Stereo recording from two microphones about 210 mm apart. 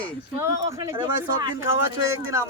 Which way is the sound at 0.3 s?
15° right (ahead or behind).